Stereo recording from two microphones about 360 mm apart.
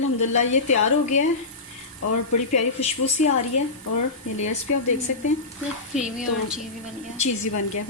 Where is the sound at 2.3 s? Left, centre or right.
Left.